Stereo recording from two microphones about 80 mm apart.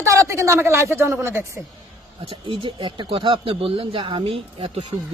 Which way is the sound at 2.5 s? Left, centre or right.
Right.